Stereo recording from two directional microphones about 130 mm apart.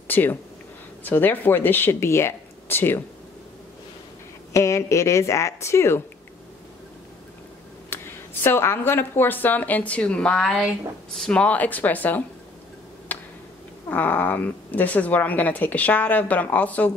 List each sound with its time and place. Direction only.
0.1 s a woman's voice: 15° left (ahead or behind)
4.5 s speech: 25° left (ahead or behind)
7.9 s a woman's voice: 15° left (ahead or behind)
13.1 s tick-tock: 10° left (ahead or behind)
13.8 s a woman's voice: 15° left (ahead or behind)